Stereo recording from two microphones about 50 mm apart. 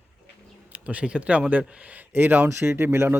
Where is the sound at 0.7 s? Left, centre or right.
Right.